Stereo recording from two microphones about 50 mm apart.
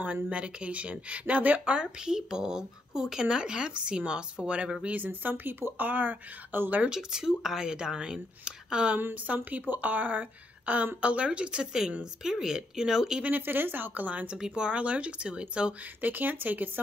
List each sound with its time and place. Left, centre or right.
0.0 s speech: right
4.8 s speech: right
6.9 s speech: centre
9.3 s speech: right; by 13.2 s centre
13.2 s speech: right
14.4 s speech: centre
16.0 s speech: right